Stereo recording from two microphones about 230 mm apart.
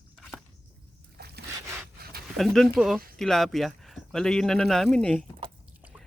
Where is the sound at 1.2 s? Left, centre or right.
Right.